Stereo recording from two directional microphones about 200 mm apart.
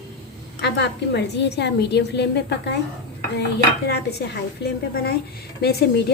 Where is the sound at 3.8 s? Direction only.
55° left (ahead or behind).